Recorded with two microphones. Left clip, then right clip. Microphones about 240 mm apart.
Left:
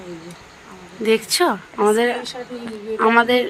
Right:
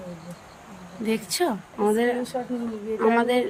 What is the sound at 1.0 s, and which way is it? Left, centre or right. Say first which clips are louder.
A woman's voice: left 8 dB; centre.